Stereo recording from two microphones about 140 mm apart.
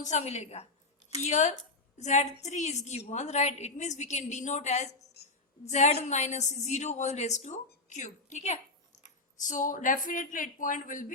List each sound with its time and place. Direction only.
0.0 s a woman's voice: 55° left (ahead or behind)
9.0 s speech: 65° left (ahead or behind)